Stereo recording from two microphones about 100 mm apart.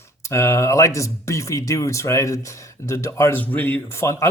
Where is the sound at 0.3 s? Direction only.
25° left (ahead or behind).